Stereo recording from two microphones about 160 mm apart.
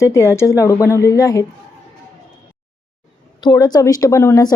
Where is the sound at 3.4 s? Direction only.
25° left (ahead or behind).